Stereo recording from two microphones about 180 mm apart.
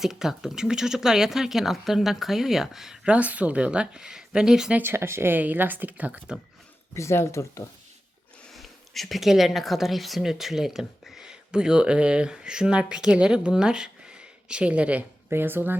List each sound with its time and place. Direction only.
0.0 s speech: centre (ahead or behind)
6.9 s speech: 15° left (ahead or behind)
8.5 s speech: centre (ahead or behind)